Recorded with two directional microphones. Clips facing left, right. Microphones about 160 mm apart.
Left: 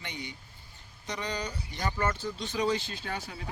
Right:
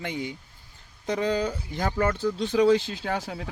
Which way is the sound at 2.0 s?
70° right (ahead or behind).